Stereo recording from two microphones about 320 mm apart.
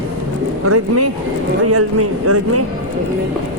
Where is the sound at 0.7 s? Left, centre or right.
Right.